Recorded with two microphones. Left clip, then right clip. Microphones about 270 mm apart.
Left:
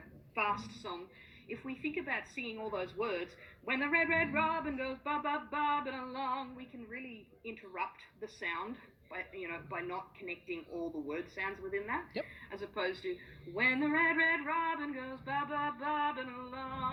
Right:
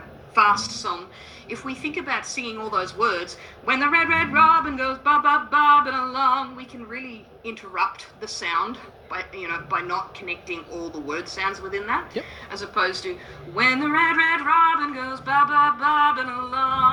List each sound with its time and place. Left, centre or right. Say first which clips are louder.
0.3 s a woman's voice: right 17 dB; centre